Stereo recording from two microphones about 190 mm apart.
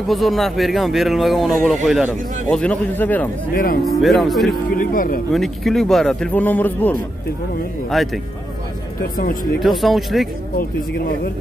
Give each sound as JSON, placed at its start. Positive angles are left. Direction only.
{"t": 0.1, "sound": "a man's voice", "side_deg": 0}
{"t": 3.5, "sound": "speech", "side_deg": 50}
{"t": 3.8, "sound": "speech", "side_deg": 0}
{"t": 4.5, "sound": "speech", "side_deg": 50}
{"t": 5.3, "sound": "speech", "side_deg": 0}
{"t": 9.6, "sound": "speech", "side_deg": 0}